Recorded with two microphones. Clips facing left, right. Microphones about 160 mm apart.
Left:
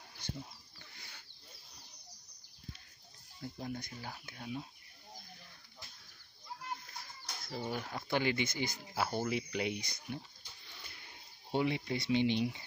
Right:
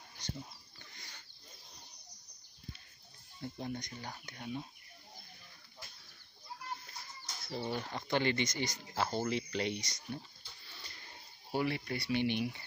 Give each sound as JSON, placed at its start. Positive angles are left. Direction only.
{"t": 0.2, "sound": "pig", "side_deg": 10}
{"t": 0.9, "sound": "a sound", "side_deg": 10}
{"t": 3.5, "sound": "speech", "side_deg": 5}
{"t": 7.4, "sound": "speech", "side_deg": 5}